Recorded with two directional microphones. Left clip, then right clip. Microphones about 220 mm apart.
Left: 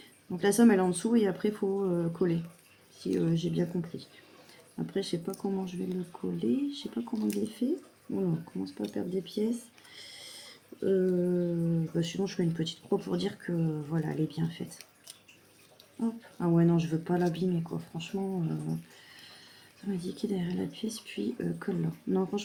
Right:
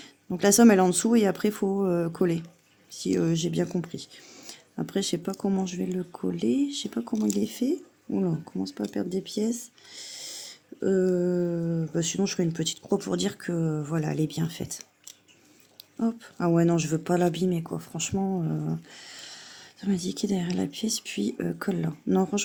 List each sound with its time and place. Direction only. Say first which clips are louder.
0.3 s speech: right 5 dB; 50° right (ahead or behind)
16.0 s speech: right 6 dB; 50° right (ahead or behind)
19.1 s a sound: right 8 dB; 55° right (ahead or behind)
19.8 s speech: right 6 dB; 50° right (ahead or behind)